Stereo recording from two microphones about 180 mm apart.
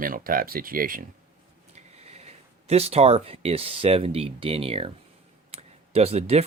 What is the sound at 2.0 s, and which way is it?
Speech, 35° right (ahead or behind).